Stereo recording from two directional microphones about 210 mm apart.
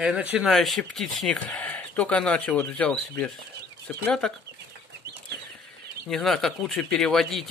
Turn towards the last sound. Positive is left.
turn(degrees=0)  # may be behind; listen again after turning